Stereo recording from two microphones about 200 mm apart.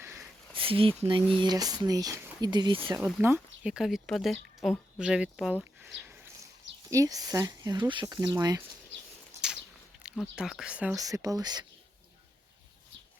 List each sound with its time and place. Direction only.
0.5 s speech: 25° right (ahead or behind)
2.9 s speech: 10° right (ahead or behind)
6.9 s speech: 15° right (ahead or behind)
9.3 s a sound: 10° right (ahead or behind)
10.0 s speech: 5° right (ahead or behind)
10.9 s speech: 15° right (ahead or behind)